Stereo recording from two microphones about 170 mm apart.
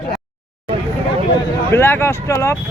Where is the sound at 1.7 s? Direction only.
15° left (ahead or behind).